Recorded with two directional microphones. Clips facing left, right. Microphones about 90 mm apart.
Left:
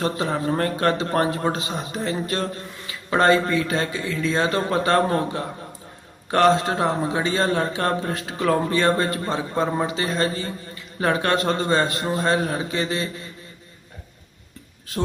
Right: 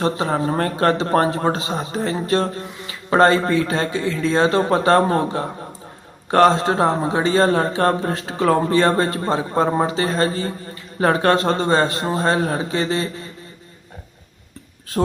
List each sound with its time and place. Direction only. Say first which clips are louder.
0.0 s a man's voice: right 3 dB; 30° right (ahead or behind)